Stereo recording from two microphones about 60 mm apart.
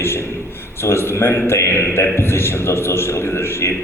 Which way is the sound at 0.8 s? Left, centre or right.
Left.